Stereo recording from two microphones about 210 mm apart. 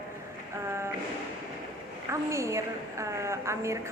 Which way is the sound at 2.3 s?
15° right (ahead or behind).